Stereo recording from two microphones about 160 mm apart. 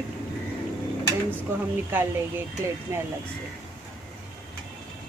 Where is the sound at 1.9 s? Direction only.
10° right (ahead or behind).